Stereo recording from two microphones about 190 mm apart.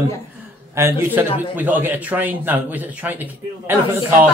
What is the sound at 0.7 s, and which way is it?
A man's voice, 15° right (ahead or behind).